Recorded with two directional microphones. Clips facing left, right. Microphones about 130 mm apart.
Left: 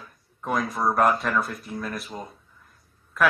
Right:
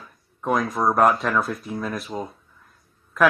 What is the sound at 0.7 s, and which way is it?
Speech, 20° right (ahead or behind).